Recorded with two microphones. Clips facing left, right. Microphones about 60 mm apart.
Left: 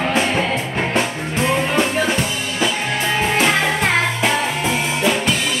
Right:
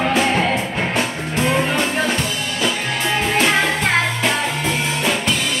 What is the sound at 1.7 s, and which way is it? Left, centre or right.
Music, centre.